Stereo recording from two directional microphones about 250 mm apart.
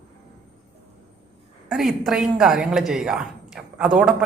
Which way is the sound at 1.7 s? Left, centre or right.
Centre.